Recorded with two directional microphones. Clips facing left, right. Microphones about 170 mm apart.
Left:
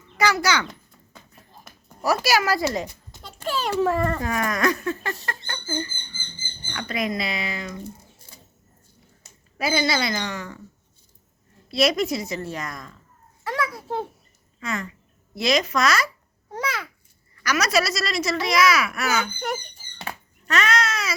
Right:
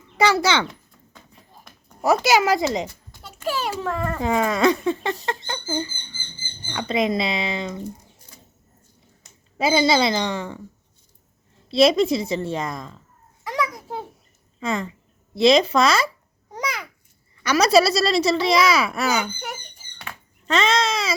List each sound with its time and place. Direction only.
0.2 s speech: 30° right (ahead or behind)
2.0 s speech: 20° right (ahead or behind)
3.4 s speech: 5° right (ahead or behind)
4.2 s speech: 25° right (ahead or behind)
9.6 s speech: 25° right (ahead or behind)
11.7 s speech: 30° right (ahead or behind)
13.4 s a sound: 15° right (ahead or behind)
14.6 s speech: 30° right (ahead or behind)
16.6 s babbling: 15° right (ahead or behind)
17.4 s speech: 30° right (ahead or behind)
19.1 s speech: 10° right (ahead or behind)
20.1 s a sound: 35° left (ahead or behind)
20.5 s speech: 25° right (ahead or behind)